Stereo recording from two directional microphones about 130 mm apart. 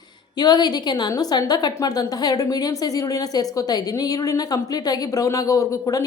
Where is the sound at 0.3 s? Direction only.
35° left (ahead or behind).